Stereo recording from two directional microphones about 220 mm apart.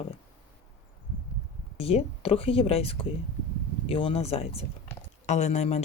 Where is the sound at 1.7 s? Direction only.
25° left (ahead or behind).